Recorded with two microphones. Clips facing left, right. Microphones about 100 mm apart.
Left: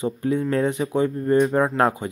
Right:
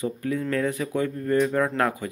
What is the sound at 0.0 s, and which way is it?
Speech, 25° left (ahead or behind).